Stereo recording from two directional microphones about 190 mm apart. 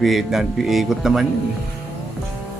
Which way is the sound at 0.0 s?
Centre (ahead or behind).